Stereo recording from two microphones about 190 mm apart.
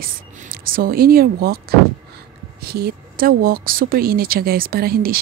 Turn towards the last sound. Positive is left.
turn(degrees=-50)  # may be behind; listen again after turning